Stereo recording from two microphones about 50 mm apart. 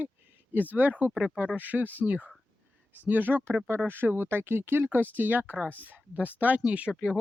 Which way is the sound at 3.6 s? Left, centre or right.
Right.